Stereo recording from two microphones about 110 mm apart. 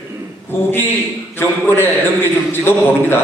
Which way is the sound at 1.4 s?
20° left (ahead or behind).